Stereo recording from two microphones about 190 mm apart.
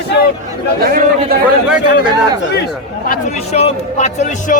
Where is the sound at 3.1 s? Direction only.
40° left (ahead or behind).